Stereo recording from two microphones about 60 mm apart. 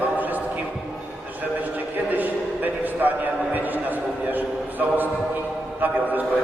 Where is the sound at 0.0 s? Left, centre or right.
Right.